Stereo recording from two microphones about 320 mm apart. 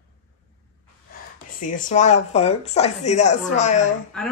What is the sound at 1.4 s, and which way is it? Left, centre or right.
Speech, left.